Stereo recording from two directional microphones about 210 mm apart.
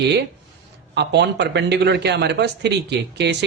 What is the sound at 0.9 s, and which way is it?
A man's voice, 55° right (ahead or behind).